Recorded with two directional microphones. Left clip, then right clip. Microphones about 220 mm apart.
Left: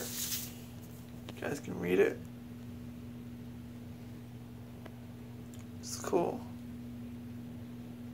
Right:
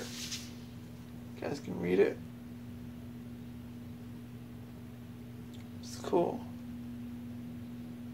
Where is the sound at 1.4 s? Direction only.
15° right (ahead or behind).